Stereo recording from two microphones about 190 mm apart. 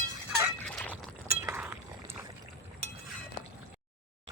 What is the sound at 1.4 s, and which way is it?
Chink, 10° right (ahead or behind).